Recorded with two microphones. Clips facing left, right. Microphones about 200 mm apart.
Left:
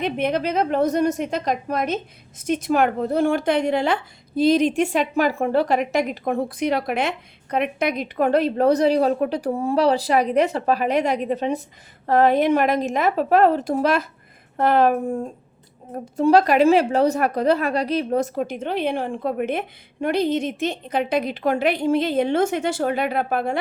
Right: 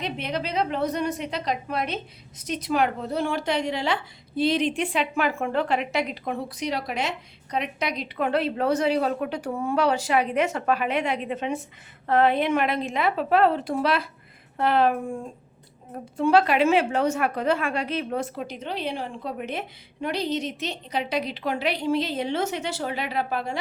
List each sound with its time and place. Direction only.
0.0 s a woman's voice: 55° left (ahead or behind)